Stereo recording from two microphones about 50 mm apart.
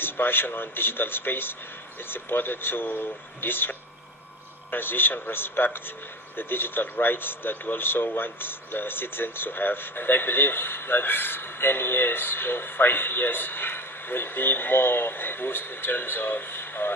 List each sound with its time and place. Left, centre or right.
0.0 s speech: left